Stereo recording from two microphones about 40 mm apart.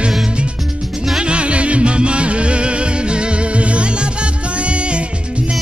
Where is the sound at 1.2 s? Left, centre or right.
Right.